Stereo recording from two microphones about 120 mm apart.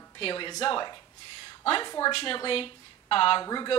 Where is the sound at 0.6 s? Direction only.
40° left (ahead or behind).